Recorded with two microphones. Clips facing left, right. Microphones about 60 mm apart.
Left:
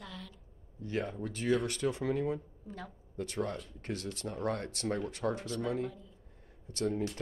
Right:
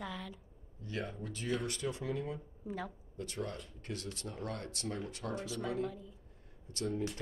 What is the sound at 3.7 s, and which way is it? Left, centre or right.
Speech, left.